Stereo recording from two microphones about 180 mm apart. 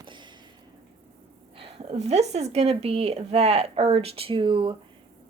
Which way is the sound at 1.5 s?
30° right (ahead or behind).